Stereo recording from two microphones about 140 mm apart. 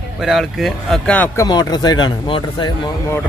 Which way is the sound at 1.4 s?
30° left (ahead or behind).